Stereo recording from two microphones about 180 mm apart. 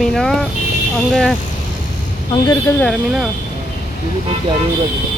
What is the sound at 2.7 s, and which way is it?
Speech, 5° left (ahead or behind).